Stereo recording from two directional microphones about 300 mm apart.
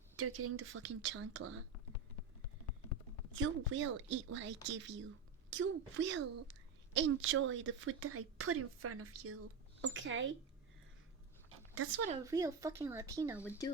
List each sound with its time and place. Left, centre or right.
0.2 s a woman's voice: right
3.3 s a woman's voice: right
11.4 s a sound: right
12.2 s speech: centre